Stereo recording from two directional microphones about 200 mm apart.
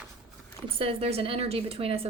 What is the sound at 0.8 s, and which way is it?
Speech, 30° right (ahead or behind).